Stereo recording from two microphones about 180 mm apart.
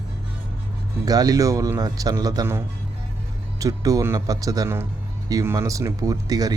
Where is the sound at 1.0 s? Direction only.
20° right (ahead or behind).